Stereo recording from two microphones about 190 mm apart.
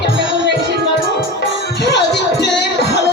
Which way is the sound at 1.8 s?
65° left (ahead or behind).